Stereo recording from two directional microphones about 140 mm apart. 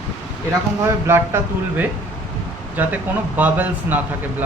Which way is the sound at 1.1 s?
15° right (ahead or behind).